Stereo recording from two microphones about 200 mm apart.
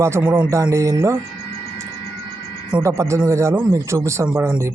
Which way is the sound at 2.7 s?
15° right (ahead or behind).